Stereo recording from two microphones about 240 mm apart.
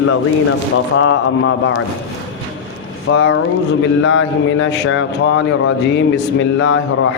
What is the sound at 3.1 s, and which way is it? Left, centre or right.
Speech, left.